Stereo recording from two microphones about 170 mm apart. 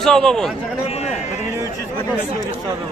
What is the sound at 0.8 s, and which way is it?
Run, 35° left (ahead or behind).